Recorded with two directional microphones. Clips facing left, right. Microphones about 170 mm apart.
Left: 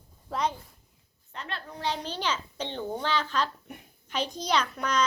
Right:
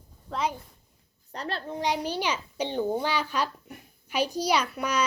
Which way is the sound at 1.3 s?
35° right (ahead or behind).